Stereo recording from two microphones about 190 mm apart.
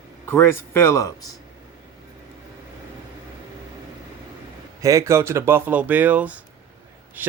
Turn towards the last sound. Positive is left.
turn(degrees=-10)  # may be behind; listen again after turning